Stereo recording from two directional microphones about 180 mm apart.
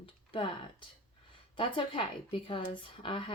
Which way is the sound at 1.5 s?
30° left (ahead or behind).